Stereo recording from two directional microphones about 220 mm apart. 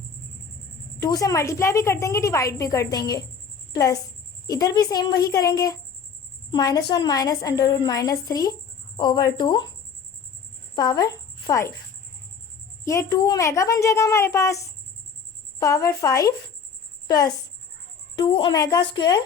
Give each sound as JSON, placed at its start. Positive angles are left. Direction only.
{"t": 0.9, "sound": "a woman's voice", "side_deg": 15}
{"t": 4.4, "sound": "a woman's voice", "side_deg": 15}
{"t": 10.8, "sound": "speech", "side_deg": 15}
{"t": 12.8, "sound": "a woman's voice", "side_deg": 15}
{"t": 15.6, "sound": "a woman's voice", "side_deg": 15}